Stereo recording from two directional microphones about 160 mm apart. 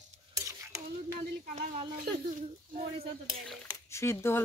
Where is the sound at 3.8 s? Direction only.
15° left (ahead or behind).